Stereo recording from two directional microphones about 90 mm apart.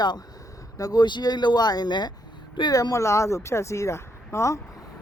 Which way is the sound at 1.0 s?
55° left (ahead or behind).